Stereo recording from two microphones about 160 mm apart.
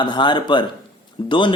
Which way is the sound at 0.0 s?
30° left (ahead or behind).